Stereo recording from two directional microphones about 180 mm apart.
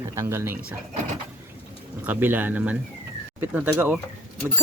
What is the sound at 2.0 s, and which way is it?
Speech, 10° right (ahead or behind).